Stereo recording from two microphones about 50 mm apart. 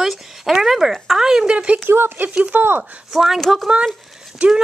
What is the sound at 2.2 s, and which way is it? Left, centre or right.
Speech, right.